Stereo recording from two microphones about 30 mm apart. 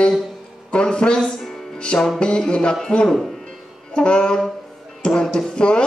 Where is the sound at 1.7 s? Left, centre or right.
Left.